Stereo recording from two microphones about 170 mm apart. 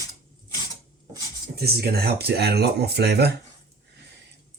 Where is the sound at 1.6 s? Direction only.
70° right (ahead or behind).